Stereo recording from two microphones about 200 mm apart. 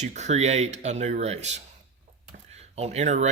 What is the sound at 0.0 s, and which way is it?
Speech, 35° right (ahead or behind).